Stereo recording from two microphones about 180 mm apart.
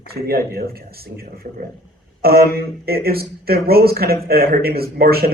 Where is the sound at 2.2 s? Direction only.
60° right (ahead or behind).